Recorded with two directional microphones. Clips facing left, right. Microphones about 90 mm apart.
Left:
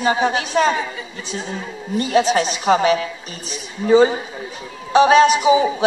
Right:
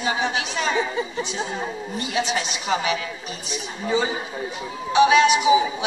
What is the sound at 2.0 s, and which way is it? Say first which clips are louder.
A woman's voice: left 9 dB; 40° left (ahead or behind).